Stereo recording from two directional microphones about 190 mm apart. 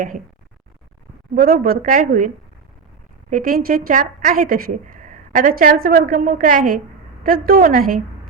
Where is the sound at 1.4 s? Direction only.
50° right (ahead or behind).